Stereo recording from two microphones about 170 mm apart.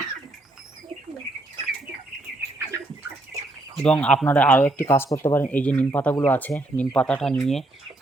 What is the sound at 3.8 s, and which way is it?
Speech, 5° left (ahead or behind).